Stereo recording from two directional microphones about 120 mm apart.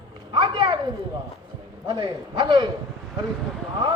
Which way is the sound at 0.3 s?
40° right (ahead or behind).